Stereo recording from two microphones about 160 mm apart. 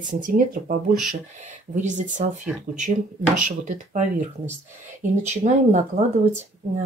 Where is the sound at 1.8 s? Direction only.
50° right (ahead or behind).